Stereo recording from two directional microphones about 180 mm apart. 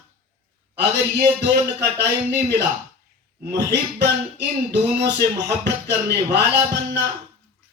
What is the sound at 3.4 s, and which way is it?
Speech, 70° right (ahead or behind).